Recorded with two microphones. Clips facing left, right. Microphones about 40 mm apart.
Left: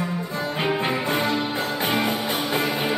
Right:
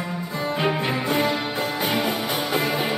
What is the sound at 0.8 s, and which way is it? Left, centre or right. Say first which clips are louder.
Music: right 1 dB; left.